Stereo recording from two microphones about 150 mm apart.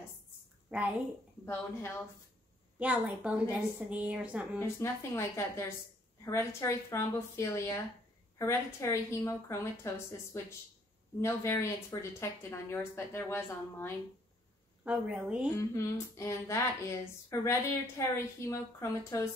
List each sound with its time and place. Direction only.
1.4 s a woman's voice: 15° left (ahead or behind)
2.8 s a woman's voice: 10° right (ahead or behind)
4.6 s a woman's voice: 15° left (ahead or behind)
14.9 s a woman's voice: 5° right (ahead or behind)
15.5 s a woman's voice: 20° left (ahead or behind)